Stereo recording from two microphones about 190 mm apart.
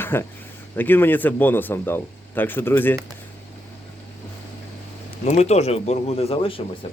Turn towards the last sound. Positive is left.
turn(degrees=30)  # may be behind; listen again after turning